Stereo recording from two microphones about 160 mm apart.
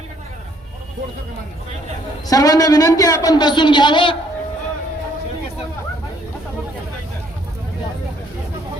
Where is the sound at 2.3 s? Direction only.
25° left (ahead or behind).